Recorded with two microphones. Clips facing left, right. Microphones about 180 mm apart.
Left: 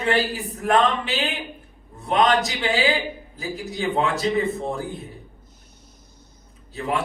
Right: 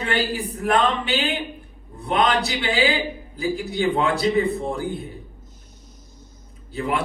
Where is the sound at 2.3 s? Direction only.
35° right (ahead or behind).